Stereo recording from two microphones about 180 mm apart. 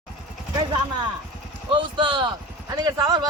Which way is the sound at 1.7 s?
25° right (ahead or behind).